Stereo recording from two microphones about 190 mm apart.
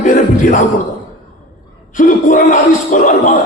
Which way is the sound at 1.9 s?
45° left (ahead or behind).